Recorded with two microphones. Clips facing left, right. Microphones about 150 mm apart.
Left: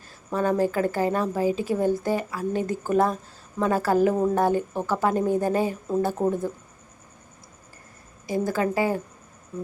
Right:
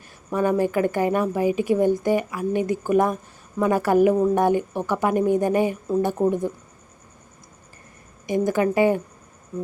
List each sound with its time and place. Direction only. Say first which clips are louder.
0.3 s a woman's voice: right 2 dB; 15° right (ahead or behind)
8.3 s a woman's voice: right 4 dB; 20° right (ahead or behind)